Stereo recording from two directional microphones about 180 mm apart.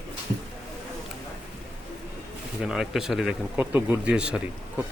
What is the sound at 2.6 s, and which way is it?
Speech, centre (ahead or behind).